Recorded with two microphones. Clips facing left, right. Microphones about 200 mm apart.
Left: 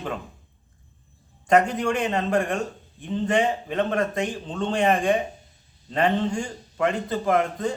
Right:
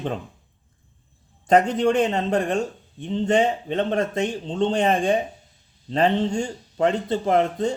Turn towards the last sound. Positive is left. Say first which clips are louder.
# right 2 dB
turn(degrees=-30)  # may be behind; listen again after turning